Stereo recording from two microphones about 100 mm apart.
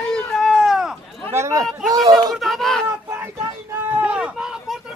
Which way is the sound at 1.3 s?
30° right (ahead or behind).